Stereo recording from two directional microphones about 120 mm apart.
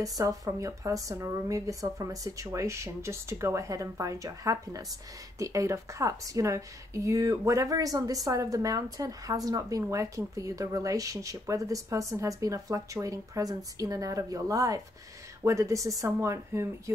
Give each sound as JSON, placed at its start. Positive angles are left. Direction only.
{"t": 0.0, "sound": "speech", "side_deg": -30}